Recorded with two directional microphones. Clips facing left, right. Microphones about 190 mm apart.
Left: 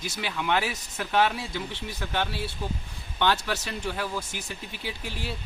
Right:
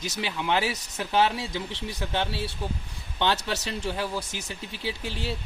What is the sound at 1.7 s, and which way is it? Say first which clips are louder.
Speech: right 2 dB; 80° right.